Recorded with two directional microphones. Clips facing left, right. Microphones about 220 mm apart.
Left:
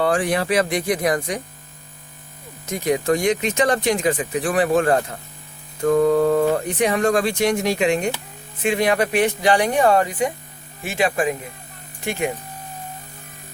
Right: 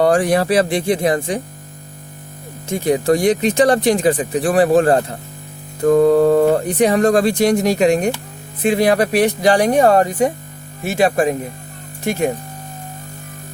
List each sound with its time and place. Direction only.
0.0 s speech: 40° right (ahead or behind)
2.6 s speech: 30° right (ahead or behind)